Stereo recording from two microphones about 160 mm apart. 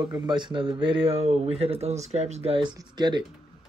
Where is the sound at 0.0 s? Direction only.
15° right (ahead or behind).